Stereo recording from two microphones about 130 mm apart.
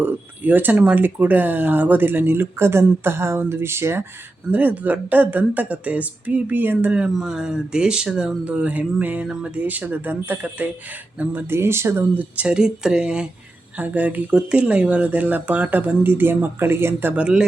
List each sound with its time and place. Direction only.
0.0 s speech: 15° right (ahead or behind)